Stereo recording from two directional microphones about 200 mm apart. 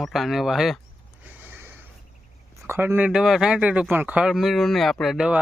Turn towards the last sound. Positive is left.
turn(degrees=-5)  # may be behind; listen again after turning